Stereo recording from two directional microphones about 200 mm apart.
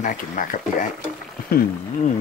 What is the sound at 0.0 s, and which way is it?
Speech, 40° left (ahead or behind).